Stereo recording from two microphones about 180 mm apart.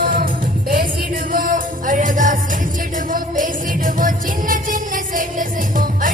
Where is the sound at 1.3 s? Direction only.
50° right (ahead or behind).